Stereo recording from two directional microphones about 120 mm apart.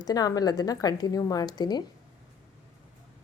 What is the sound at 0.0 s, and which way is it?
Speech, 30° left (ahead or behind).